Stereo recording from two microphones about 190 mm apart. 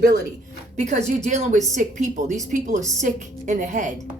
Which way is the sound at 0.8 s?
35° right (ahead or behind).